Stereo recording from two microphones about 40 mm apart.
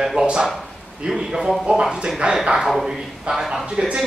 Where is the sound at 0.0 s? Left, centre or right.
Centre.